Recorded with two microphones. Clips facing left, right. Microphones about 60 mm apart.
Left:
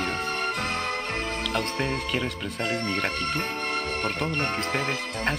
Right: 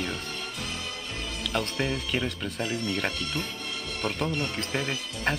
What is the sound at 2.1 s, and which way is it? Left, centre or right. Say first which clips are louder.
Speech: left 1 dB; centre.